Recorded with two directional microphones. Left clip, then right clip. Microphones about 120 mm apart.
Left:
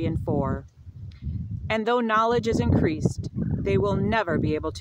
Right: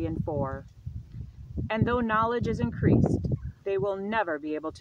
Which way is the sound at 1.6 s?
40° left (ahead or behind).